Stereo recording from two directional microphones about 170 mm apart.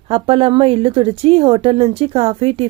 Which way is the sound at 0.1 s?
35° right (ahead or behind).